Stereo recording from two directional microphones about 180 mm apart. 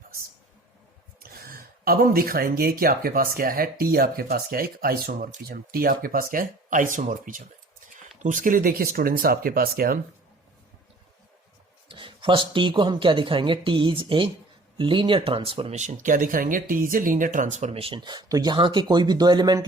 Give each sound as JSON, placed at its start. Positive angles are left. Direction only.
{"t": 1.2, "sound": "speech", "side_deg": -55}
{"t": 11.9, "sound": "speech", "side_deg": -30}